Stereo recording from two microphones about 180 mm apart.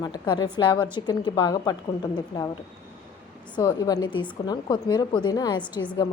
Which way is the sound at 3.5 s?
20° left (ahead or behind).